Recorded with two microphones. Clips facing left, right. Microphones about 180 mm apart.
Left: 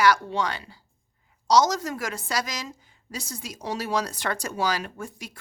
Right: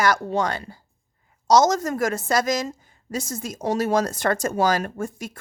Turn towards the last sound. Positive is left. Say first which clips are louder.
# right 7 dB
turn(degrees=-45)  # may be behind; listen again after turning